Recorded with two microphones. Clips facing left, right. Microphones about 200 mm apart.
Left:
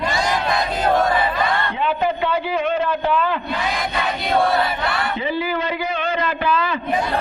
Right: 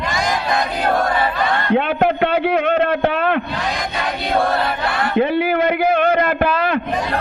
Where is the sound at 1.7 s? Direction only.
65° right (ahead or behind).